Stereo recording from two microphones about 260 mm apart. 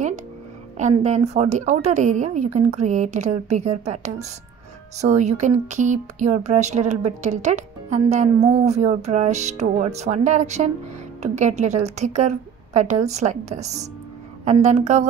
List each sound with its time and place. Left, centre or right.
0.7 s a woman's voice: right